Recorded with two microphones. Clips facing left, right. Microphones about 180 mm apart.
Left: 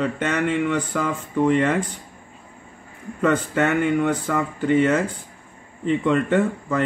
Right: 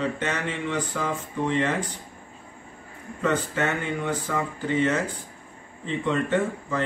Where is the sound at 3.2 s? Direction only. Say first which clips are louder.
Left 5 dB; 60° left (ahead or behind).